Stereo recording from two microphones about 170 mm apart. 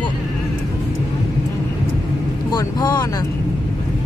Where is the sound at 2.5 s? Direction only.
25° left (ahead or behind).